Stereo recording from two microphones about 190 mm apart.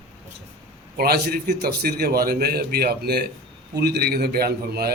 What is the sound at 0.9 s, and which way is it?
Speech, 55° right (ahead or behind).